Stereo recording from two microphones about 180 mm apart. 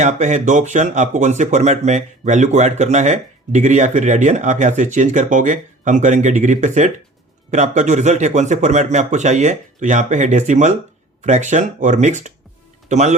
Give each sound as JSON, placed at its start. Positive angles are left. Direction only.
{"t": 0.0, "sound": "speech", "side_deg": -40}